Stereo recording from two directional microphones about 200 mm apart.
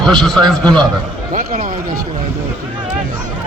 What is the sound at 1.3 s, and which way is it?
Speech, 45° right (ahead or behind).